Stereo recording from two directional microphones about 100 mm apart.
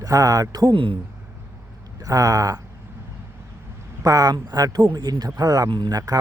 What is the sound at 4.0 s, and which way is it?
Speech, 35° right (ahead or behind).